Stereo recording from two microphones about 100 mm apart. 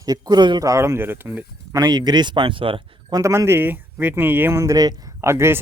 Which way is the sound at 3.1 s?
35° right (ahead or behind).